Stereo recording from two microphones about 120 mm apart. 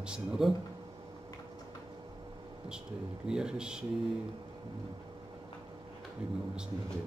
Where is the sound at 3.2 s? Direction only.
5° right (ahead or behind).